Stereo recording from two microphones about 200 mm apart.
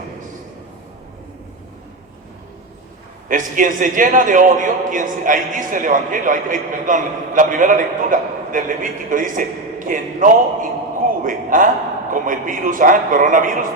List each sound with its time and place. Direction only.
3.2 s a man's voice: 40° right (ahead or behind)